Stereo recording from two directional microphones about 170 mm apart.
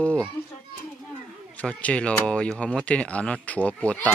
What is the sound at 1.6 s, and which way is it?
Speech, 5° left (ahead or behind).